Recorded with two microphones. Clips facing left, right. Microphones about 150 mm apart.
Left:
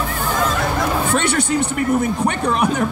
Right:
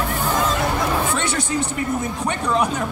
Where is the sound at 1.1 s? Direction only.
65° left (ahead or behind).